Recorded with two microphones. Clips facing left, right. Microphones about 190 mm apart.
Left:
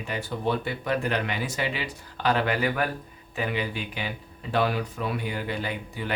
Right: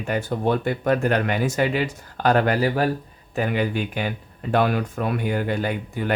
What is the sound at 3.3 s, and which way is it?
Speech, 50° right (ahead or behind).